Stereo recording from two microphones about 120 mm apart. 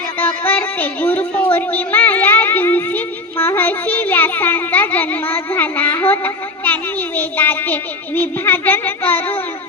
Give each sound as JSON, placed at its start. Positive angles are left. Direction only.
{"t": 0.2, "sound": "music", "side_deg": 15}
{"t": 1.5, "sound": "a woman's voice", "side_deg": 15}